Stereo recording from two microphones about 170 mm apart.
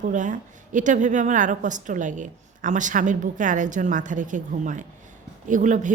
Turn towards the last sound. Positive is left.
turn(degrees=-45)  # may be behind; listen again after turning